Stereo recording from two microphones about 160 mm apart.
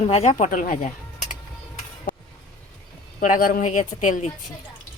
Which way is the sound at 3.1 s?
55° left (ahead or behind).